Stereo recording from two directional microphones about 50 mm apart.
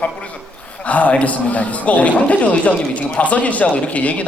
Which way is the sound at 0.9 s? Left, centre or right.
Left.